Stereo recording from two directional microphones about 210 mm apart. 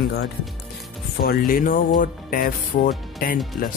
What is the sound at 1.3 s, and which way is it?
Speech, 45° left (ahead or behind).